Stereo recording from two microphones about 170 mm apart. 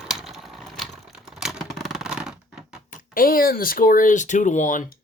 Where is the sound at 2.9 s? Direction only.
55° left (ahead or behind).